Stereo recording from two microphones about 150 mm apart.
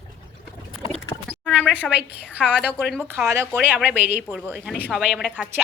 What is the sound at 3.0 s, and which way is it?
Speech, 10° right (ahead or behind).